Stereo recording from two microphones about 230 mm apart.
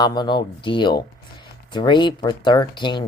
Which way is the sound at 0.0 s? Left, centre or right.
Centre.